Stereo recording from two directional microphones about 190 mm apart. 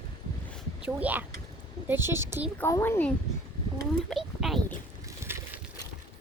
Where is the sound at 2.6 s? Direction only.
10° left (ahead or behind).